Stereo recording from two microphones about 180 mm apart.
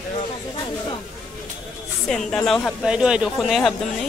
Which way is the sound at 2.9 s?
5° right (ahead or behind).